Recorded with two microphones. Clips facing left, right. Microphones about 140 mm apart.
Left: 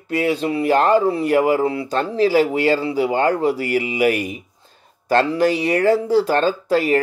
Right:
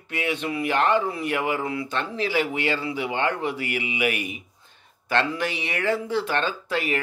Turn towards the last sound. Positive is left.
turn(degrees=40)  # may be behind; listen again after turning